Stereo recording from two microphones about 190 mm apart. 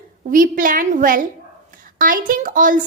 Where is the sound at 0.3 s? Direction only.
45° right (ahead or behind).